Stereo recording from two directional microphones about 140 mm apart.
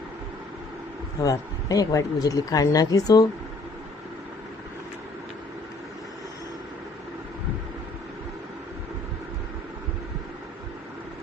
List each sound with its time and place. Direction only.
1.2 s speech: 25° left (ahead or behind)